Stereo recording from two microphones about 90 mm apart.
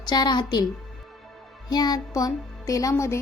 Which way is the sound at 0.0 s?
50° left (ahead or behind).